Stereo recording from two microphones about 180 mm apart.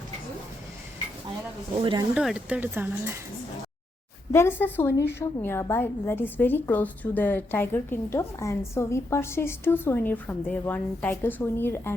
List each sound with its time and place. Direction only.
1.7 s speech: 25° right (ahead or behind)
2.1 s speech: 5° right (ahead or behind)
4.3 s a woman's voice: 15° left (ahead or behind)